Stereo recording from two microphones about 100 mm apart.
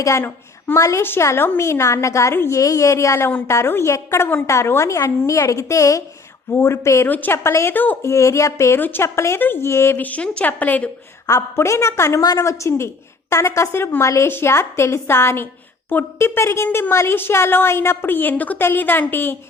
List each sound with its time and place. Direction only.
0.0 s a woman's voice: 30° left (ahead or behind)
7.1 s a woman's voice: 15° left (ahead or behind)
8.1 s a woman's voice: 30° left (ahead or behind)
11.3 s a woman's voice: 30° left (ahead or behind)
16.9 s a woman's voice: 25° left (ahead or behind)